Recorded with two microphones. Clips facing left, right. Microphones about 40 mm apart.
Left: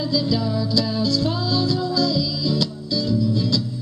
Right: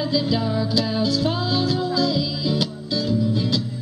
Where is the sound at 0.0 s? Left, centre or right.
Right.